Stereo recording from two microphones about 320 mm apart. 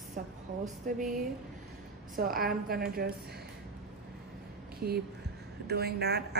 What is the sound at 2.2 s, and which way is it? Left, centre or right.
Speech, right.